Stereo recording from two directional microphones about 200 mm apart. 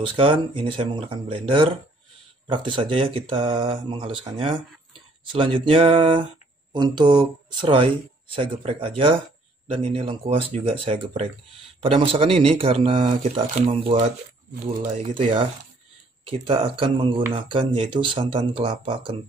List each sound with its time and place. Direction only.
0.0 s speech: 25° right (ahead or behind)